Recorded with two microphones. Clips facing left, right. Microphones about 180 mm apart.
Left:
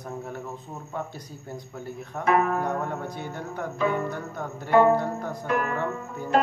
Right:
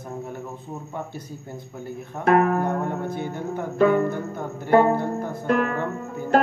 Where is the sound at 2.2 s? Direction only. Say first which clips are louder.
Right 4 dB; 50° right (ahead or behind).